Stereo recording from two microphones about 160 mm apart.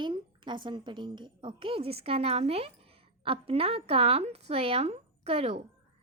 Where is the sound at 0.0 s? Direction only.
30° right (ahead or behind).